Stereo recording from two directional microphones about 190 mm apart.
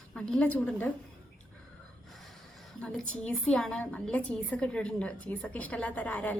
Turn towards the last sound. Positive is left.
turn(degrees=5)  # may be behind; listen again after turning